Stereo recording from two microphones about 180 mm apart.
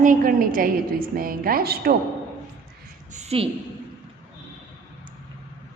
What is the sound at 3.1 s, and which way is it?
Speech, 35° right (ahead or behind).